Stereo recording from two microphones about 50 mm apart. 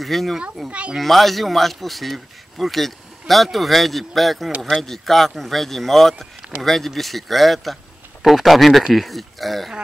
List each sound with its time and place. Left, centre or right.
0.0 s speech: centre
0.7 s speech: right
0.9 s speech: centre